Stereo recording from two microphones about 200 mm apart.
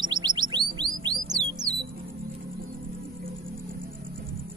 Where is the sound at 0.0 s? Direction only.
20° right (ahead or behind).